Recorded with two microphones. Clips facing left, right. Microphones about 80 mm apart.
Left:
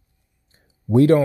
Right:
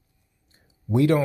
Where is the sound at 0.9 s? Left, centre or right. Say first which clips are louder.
Left 6 dB; left.